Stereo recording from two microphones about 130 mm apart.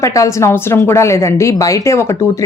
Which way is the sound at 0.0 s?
25° left (ahead or behind).